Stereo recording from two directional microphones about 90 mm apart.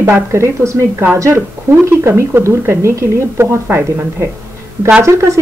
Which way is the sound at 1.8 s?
30° right (ahead or behind).